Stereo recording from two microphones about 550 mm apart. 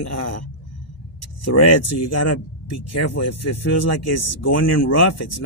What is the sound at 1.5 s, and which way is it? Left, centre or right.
Speech, left.